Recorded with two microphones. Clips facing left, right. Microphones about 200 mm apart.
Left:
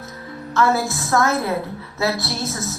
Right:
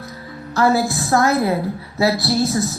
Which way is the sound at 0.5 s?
35° right (ahead or behind).